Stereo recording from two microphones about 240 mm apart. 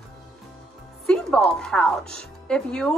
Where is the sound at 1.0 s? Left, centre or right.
Centre.